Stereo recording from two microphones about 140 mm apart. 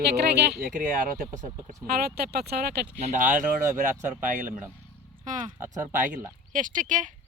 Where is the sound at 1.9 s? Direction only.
90° right.